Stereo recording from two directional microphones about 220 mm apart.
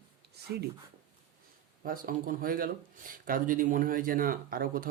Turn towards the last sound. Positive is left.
turn(degrees=-40)  # may be behind; listen again after turning